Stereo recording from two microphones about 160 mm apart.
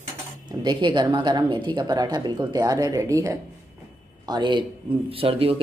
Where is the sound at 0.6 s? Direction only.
30° right (ahead or behind).